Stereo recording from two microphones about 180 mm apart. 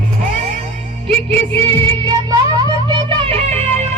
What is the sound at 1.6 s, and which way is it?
Music, 25° right (ahead or behind).